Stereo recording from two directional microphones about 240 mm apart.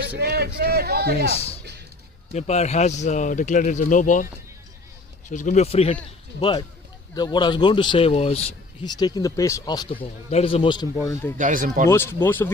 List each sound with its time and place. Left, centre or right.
0.2 s a man's voice: right
2.3 s speech: left
5.3 s a man's voice: left; by 11.3 s centre
11.3 s a man's voice: right
11.9 s speech: centre